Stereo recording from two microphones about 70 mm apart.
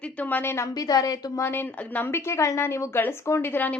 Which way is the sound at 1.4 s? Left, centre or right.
Left.